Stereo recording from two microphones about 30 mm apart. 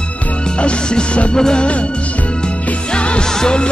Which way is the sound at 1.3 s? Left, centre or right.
Left.